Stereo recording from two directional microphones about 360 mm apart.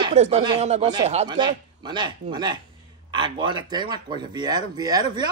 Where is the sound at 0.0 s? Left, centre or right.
Centre.